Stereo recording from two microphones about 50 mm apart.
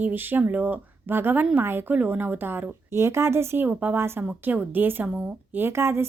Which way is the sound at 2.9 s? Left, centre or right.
Right.